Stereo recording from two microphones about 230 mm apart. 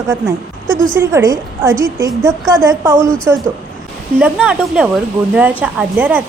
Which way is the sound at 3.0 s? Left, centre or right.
Centre.